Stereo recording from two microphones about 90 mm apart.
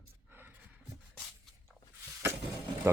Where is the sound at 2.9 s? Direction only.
30° right (ahead or behind).